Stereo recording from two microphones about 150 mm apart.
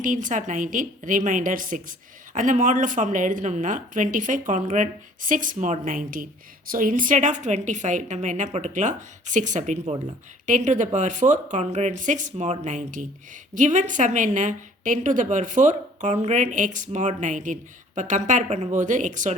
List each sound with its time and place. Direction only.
0.0 s a woman's voice: 60° right (ahead or behind)